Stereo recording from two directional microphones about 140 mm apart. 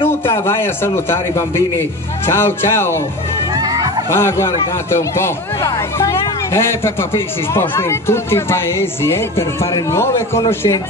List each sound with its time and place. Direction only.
0.0 s a man's voice: 15° left (ahead or behind)
3.5 s music: 25° right (ahead or behind)
4.1 s a man's voice: 20° left (ahead or behind)